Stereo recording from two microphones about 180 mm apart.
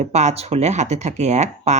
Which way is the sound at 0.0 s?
40° right (ahead or behind).